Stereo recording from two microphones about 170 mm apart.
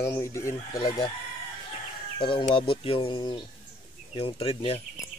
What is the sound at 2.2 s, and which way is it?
Speech, 30° left (ahead or behind).